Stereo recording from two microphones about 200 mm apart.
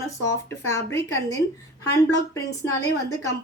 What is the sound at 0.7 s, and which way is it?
Speech, 15° left (ahead or behind).